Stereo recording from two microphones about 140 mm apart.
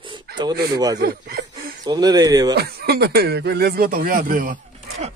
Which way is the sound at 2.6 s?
90° right.